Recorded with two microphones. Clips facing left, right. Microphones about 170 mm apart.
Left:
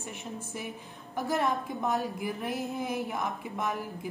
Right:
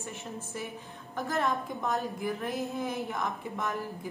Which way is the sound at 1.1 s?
10° left (ahead or behind).